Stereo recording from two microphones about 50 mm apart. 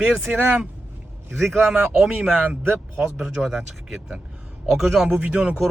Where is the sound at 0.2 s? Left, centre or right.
Right.